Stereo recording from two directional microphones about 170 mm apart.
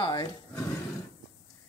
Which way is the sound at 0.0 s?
25° left (ahead or behind).